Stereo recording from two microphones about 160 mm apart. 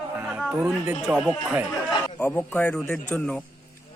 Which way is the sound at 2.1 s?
10° left (ahead or behind).